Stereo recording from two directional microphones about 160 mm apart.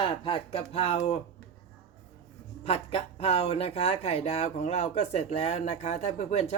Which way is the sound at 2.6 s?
40° left (ahead or behind).